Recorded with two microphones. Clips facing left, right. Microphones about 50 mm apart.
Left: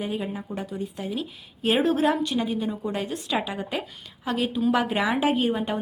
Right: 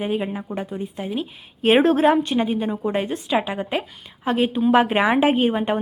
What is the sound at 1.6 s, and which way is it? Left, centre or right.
A woman's voice, right.